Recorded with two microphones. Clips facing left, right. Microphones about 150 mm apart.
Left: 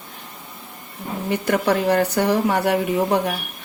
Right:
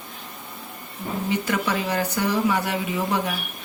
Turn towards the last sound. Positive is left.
turn(degrees=55)  # may be behind; listen again after turning